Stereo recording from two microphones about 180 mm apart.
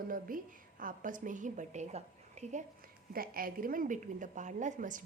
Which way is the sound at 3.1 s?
55° right (ahead or behind).